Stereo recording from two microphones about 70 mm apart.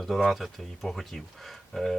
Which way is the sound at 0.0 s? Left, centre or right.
Centre.